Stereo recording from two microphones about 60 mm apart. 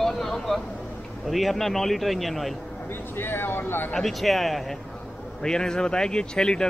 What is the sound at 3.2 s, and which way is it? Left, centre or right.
Speech, left.